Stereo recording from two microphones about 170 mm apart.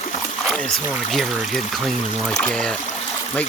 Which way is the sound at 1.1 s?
Centre (ahead or behind).